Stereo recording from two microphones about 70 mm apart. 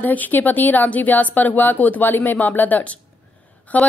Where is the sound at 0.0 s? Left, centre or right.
Left.